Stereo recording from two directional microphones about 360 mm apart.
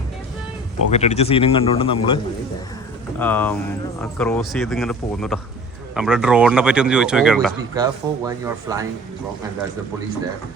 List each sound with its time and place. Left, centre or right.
0.9 s speech: centre